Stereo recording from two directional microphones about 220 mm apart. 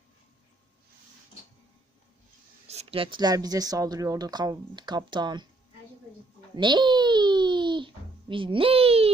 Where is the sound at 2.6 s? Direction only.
25° right (ahead or behind).